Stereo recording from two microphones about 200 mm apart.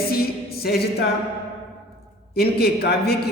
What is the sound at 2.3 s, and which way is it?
Speech, 50° left (ahead or behind).